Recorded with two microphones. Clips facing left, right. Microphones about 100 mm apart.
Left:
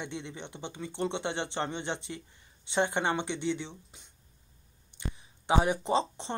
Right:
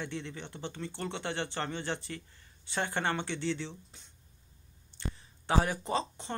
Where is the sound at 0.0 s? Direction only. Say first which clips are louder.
Even; 20° left (ahead or behind).